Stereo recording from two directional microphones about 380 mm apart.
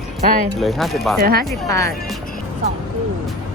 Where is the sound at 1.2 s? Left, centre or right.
Right.